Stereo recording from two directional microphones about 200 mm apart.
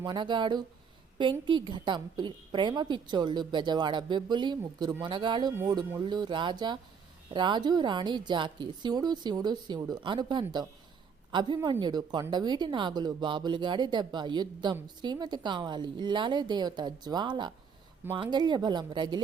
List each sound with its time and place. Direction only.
0.0 s a woman's voice: 20° right (ahead or behind)